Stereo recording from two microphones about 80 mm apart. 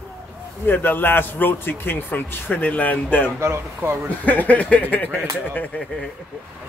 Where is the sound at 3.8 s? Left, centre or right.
Right.